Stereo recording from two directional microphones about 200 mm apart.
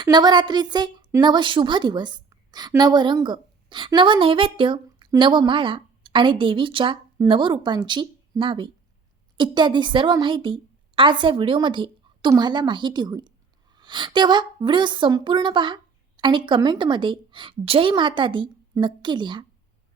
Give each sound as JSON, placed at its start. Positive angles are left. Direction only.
{"t": 0.0, "sound": "a woman's voice", "side_deg": -20}